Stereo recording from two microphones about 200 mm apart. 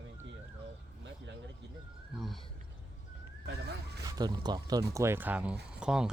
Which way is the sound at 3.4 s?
55° right (ahead or behind).